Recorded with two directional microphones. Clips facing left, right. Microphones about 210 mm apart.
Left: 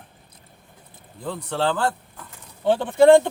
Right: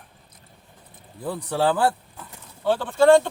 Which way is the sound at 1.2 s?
10° right (ahead or behind).